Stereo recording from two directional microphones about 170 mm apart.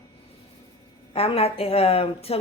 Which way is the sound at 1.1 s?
35° left (ahead or behind).